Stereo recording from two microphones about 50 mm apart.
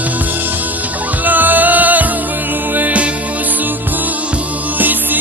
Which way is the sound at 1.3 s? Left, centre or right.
Right.